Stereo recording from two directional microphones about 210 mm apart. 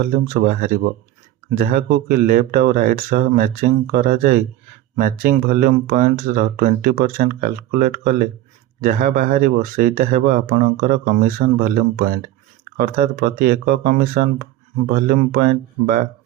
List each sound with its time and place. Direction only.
0.0 s speech: 40° right (ahead or behind)